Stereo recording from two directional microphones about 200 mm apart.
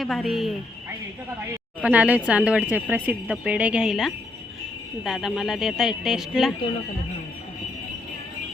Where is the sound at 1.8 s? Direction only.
5° right (ahead or behind).